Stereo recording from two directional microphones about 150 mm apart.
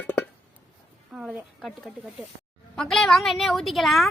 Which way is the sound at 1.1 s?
5° right (ahead or behind).